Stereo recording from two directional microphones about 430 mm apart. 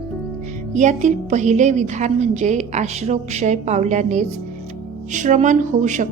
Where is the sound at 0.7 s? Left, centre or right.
Centre.